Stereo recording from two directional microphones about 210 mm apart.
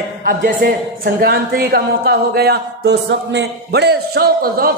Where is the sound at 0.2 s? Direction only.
45° right (ahead or behind).